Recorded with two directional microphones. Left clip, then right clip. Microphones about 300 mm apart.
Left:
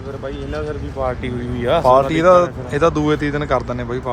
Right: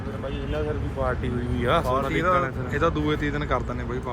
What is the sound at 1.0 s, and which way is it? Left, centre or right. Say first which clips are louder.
Speech: left 6 dB; left.